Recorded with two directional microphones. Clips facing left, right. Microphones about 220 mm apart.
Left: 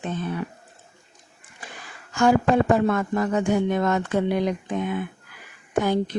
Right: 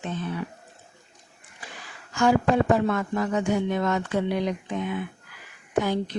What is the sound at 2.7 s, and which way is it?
Speech, 50° left (ahead or behind).